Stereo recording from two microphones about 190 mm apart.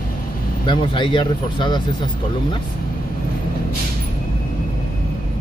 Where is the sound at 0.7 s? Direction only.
25° left (ahead or behind).